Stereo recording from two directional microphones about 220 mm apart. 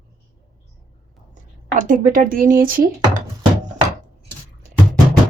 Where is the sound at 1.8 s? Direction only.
35° right (ahead or behind).